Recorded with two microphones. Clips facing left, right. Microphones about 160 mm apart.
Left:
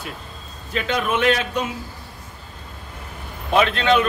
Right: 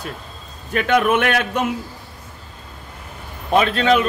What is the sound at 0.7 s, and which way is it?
A man's voice, 60° right (ahead or behind).